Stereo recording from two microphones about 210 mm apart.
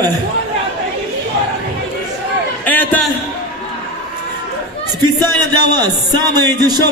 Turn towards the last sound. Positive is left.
turn(degrees=-20)  # may be behind; listen again after turning